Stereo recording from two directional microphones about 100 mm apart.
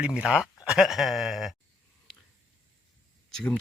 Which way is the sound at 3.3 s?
5° left (ahead or behind).